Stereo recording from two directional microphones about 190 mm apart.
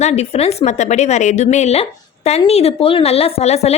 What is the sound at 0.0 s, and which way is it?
A woman's voice, 35° left (ahead or behind).